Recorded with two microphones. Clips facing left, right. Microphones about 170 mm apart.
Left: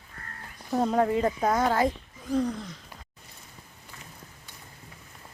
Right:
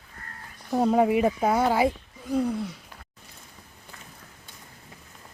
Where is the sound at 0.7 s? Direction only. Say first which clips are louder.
Right 3 dB; 10° right (ahead or behind).